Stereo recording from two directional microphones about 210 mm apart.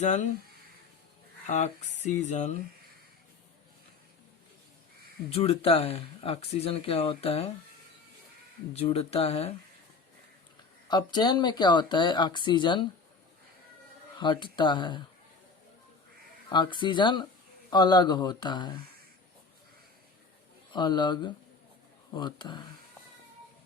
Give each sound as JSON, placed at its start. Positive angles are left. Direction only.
{"t": 1.5, "sound": "speech", "side_deg": 35}
{"t": 5.3, "sound": "speech", "side_deg": 25}
{"t": 8.7, "sound": "speech", "side_deg": 30}
{"t": 10.8, "sound": "speech", "side_deg": 20}
{"t": 14.2, "sound": "speech", "side_deg": 20}
{"t": 16.5, "sound": "speech", "side_deg": 20}
{"t": 20.7, "sound": "speech", "side_deg": 20}